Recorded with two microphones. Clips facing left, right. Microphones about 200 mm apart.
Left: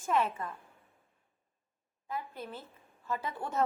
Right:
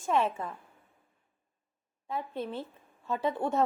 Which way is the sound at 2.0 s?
25° right (ahead or behind).